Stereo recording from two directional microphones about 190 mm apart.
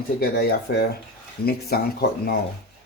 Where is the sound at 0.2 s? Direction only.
55° left (ahead or behind).